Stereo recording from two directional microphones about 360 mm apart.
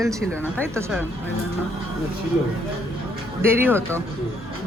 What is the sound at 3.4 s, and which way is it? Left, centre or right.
Speech, centre.